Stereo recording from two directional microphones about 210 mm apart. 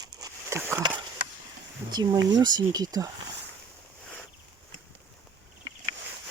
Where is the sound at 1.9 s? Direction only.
20° right (ahead or behind).